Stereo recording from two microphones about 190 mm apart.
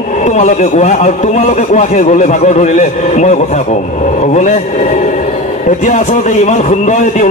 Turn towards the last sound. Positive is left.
turn(degrees=40)  # may be behind; listen again after turning